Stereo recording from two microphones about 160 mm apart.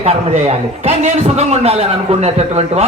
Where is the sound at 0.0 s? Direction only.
40° right (ahead or behind).